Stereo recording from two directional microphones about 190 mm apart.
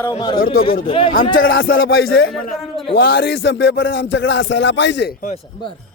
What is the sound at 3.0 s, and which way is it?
Speech, 55° left (ahead or behind).